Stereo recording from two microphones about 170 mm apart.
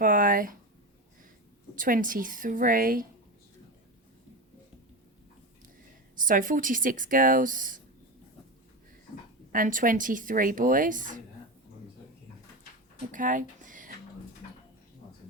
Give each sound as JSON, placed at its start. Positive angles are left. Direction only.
{"t": 0.0, "sound": "a sound", "side_deg": -55}
{"t": 1.7, "sound": "speech", "side_deg": -50}
{"t": 6.1, "sound": "speech", "side_deg": -50}
{"t": 9.5, "sound": "speech", "side_deg": -55}
{"t": 13.1, "sound": "speech", "side_deg": -50}